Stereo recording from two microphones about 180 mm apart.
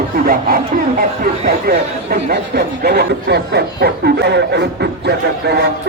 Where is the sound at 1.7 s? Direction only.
60° right (ahead or behind).